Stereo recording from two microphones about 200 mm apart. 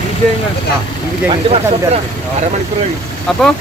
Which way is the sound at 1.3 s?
30° right (ahead or behind).